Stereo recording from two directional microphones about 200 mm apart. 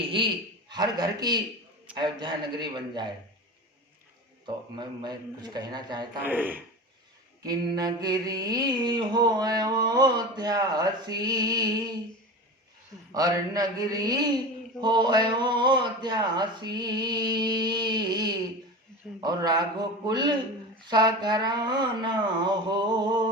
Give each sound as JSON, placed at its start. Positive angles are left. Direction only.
{"t": 0.7, "sound": "mantra", "side_deg": -20}
{"t": 4.4, "sound": "mantra", "side_deg": -20}
{"t": 6.2, "sound": "speech", "side_deg": -10}
{"t": 7.4, "sound": "mantra", "side_deg": -20}
{"t": 13.1, "sound": "mantra", "side_deg": -20}